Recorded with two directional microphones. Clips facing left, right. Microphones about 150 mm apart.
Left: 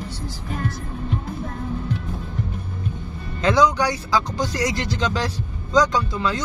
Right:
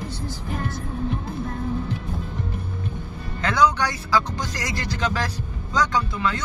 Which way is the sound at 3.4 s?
20° left (ahead or behind).